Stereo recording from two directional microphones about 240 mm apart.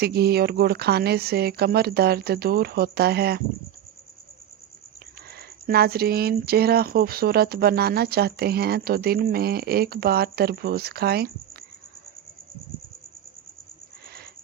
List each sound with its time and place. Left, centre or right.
0.0 s speech: right
5.4 s speech: right